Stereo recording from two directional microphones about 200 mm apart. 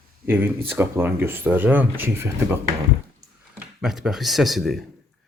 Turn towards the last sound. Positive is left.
turn(degrees=0)  # may be behind; listen again after turning